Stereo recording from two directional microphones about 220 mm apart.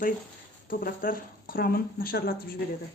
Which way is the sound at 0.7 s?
40° left (ahead or behind).